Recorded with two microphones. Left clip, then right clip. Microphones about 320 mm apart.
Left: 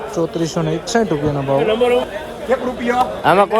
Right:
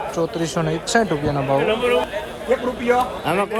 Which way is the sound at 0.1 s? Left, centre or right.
Centre.